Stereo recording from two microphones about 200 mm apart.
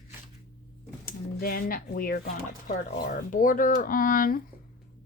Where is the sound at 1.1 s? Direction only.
45° left (ahead or behind).